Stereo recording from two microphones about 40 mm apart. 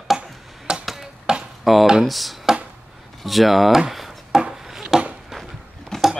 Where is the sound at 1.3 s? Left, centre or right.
Right.